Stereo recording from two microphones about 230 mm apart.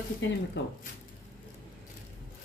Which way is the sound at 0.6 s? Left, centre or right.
Left.